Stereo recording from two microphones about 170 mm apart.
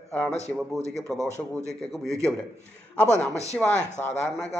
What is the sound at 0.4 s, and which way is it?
Speech, 40° left (ahead or behind).